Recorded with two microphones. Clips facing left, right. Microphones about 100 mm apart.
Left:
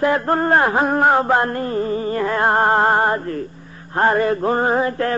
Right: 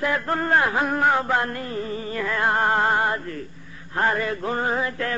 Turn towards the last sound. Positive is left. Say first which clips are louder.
# left 7 dB
turn(degrees=40)  # may be behind; listen again after turning